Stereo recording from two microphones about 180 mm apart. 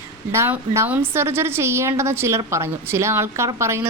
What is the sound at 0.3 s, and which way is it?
A woman's voice, 15° right (ahead or behind).